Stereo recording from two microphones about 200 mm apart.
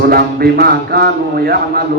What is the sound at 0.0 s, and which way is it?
A man's voice, 50° right (ahead or behind).